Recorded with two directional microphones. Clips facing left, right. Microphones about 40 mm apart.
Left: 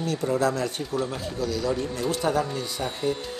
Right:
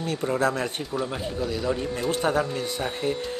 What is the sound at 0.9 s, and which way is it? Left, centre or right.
A man's voice, centre.